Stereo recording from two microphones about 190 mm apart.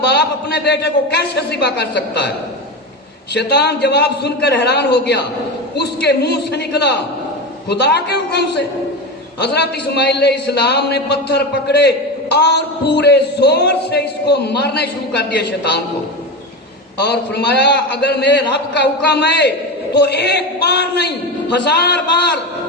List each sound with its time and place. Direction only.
0.0 s a man's voice: 60° left (ahead or behind)
3.3 s a man's voice: 60° left (ahead or behind)
17.0 s a man's voice: 60° left (ahead or behind)